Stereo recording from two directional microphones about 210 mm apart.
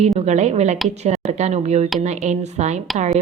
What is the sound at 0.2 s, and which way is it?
A woman's voice, 30° right (ahead or behind).